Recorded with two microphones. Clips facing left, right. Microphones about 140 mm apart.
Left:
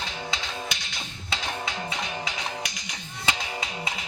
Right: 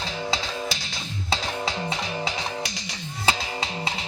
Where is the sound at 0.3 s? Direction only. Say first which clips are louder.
Right 5 dB; 35° right (ahead or behind).